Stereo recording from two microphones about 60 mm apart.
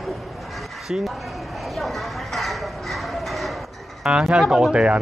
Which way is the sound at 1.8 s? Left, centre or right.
Centre.